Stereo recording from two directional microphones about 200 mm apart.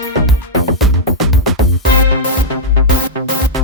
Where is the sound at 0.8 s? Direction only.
Centre (ahead or behind).